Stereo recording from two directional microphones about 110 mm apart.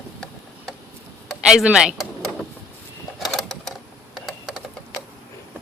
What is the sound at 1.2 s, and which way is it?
Speech, centre (ahead or behind).